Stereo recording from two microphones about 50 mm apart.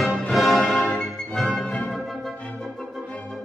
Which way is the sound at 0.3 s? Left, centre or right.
Centre.